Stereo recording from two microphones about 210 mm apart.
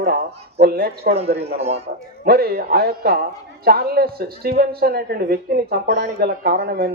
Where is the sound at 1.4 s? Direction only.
30° right (ahead or behind).